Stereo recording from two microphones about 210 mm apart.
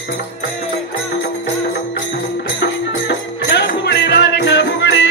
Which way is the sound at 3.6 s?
55° left (ahead or behind).